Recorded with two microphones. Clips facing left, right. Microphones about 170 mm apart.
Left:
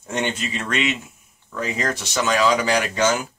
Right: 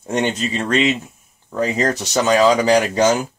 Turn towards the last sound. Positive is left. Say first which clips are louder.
# right 6 dB
turn(degrees=-40)  # may be behind; listen again after turning